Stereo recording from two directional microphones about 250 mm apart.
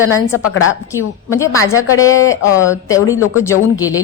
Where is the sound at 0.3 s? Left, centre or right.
Left.